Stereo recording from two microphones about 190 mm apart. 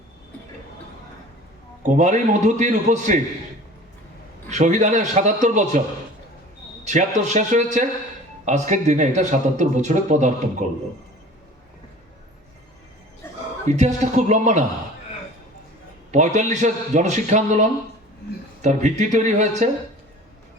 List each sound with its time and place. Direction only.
1.8 s speech: 40° right (ahead or behind)
4.4 s speech: 40° right (ahead or behind)
6.8 s speech: 40° right (ahead or behind)
13.2 s a sound: 10° left (ahead or behind)
13.7 s speech: 40° right (ahead or behind)
16.1 s speech: 40° right (ahead or behind)